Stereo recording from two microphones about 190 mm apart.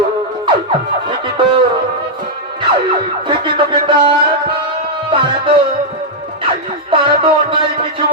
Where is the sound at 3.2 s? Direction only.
25° right (ahead or behind).